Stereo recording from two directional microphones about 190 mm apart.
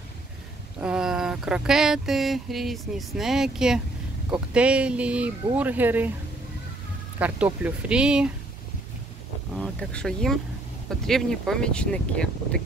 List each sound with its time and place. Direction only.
0.7 s speech: 5° right (ahead or behind)
7.2 s speech: 10° right (ahead or behind)
9.5 s speech: 5° left (ahead or behind)